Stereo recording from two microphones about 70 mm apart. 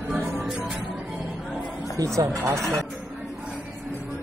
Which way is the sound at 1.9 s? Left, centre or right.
Right.